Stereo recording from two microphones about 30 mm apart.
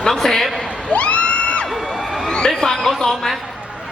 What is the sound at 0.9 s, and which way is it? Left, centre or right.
Crowd, left.